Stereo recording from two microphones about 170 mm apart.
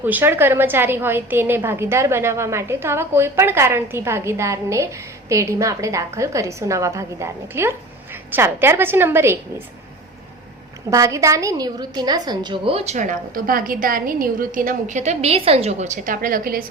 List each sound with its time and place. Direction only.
0.0 s a woman's voice: 10° right (ahead or behind)
10.8 s a woman's voice: 20° right (ahead or behind); by 16.6 s 60° right (ahead or behind)